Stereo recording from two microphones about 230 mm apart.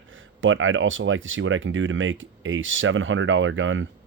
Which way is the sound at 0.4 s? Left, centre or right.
Right.